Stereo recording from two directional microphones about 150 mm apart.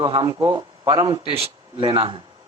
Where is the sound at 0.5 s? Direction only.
30° right (ahead or behind).